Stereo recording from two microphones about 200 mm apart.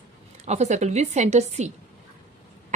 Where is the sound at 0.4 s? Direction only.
35° right (ahead or behind).